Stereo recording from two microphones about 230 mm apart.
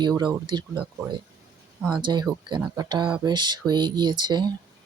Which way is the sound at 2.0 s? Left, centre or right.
Centre.